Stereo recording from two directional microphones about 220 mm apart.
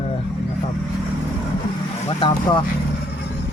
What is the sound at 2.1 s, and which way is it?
Speech, 25° left (ahead or behind).